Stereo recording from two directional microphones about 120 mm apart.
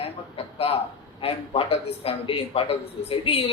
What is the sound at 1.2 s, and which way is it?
Speech, 50° left (ahead or behind).